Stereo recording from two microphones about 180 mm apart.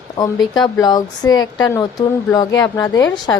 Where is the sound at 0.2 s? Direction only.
20° left (ahead or behind).